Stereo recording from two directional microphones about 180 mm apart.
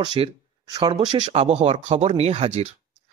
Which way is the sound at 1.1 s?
35° right (ahead or behind).